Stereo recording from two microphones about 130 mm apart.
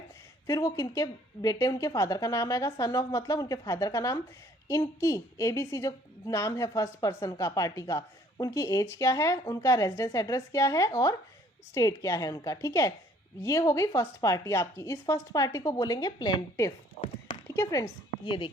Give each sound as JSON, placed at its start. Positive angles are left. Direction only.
{"t": 0.4, "sound": "a woman's voice", "side_deg": 25}
{"t": 18.3, "sound": "speech", "side_deg": 40}